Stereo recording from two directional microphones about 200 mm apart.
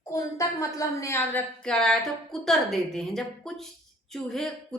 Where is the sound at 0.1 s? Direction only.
15° left (ahead or behind).